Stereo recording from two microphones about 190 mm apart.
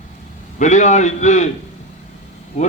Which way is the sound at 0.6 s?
40° left (ahead or behind).